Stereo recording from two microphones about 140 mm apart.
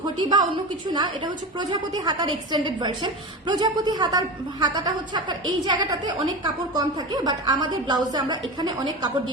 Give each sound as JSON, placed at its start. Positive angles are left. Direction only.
{"t": 0.2, "sound": "a woman's voice", "side_deg": -30}
{"t": 1.5, "sound": "a woman's voice", "side_deg": -30}